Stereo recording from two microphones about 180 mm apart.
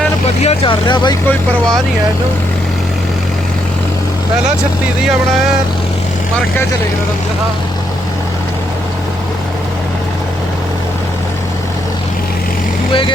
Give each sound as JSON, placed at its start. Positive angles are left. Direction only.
{"t": 0.4, "sound": "speech", "side_deg": 30}
{"t": 12.9, "sound": "speech", "side_deg": 30}